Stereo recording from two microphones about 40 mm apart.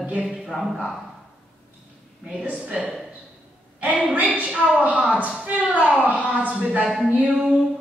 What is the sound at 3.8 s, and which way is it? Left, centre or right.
A woman's voice, right.